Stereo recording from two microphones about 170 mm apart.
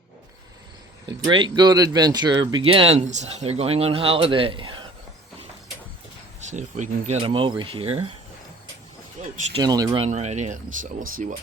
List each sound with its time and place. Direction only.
1.0 s speech: 30° right (ahead or behind)
6.5 s speech: 45° right (ahead or behind)
9.6 s speech: 20° right (ahead or behind)
10.0 s speech: 40° right (ahead or behind)